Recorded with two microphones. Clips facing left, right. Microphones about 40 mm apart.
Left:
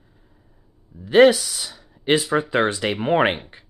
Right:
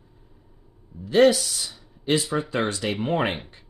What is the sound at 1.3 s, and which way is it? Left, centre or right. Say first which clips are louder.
Speech: left 2 dB; left.